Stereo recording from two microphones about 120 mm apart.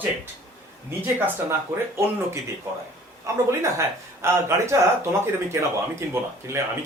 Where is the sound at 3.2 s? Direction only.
25° right (ahead or behind).